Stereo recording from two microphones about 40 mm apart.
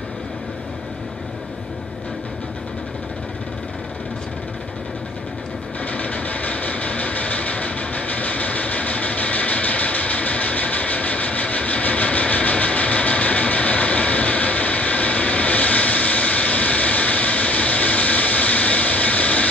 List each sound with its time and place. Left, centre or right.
5.9 s train: left